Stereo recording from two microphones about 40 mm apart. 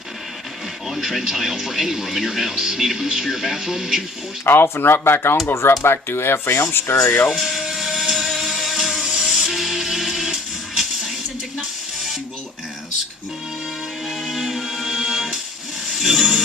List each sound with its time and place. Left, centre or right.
0.9 s speech: centre
4.4 s speech: left
7.3 s music: centre
8.9 s music: centre
14.3 s music: centre